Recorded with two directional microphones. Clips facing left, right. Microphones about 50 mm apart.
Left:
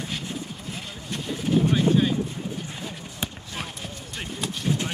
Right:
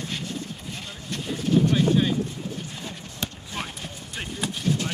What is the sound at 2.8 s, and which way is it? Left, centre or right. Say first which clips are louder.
Basketball bounce: left 1 dB; centre.